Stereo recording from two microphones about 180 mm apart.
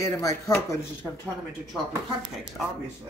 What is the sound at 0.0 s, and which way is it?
Speech, 20° left (ahead or behind).